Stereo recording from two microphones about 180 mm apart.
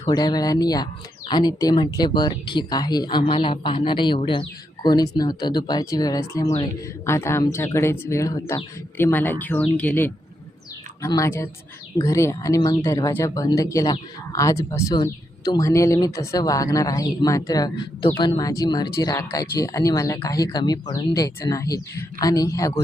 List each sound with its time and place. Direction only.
0.0 s speech: 20° left (ahead or behind)